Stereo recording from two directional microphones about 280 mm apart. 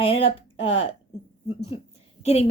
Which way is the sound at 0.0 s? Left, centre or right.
Centre.